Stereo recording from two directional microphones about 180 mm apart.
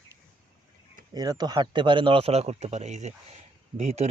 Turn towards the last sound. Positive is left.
turn(degrees=-40)  # may be behind; listen again after turning